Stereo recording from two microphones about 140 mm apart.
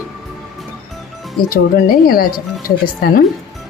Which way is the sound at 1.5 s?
90° left.